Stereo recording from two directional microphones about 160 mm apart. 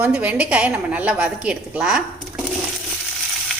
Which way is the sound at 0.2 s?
10° right (ahead or behind).